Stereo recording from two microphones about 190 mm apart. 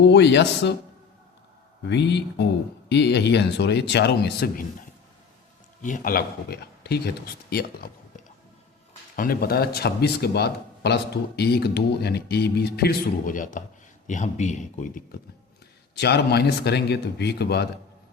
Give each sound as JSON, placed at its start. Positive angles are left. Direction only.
{"t": 0.0, "sound": "speech", "side_deg": 65}
{"t": 1.8, "sound": "speech", "side_deg": 65}
{"t": 5.8, "sound": "speech", "side_deg": 45}
{"t": 16.0, "sound": "speech", "side_deg": 60}